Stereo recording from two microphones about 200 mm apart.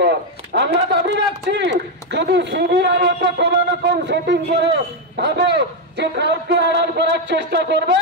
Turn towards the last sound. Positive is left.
turn(degrees=-60)  # may be behind; listen again after turning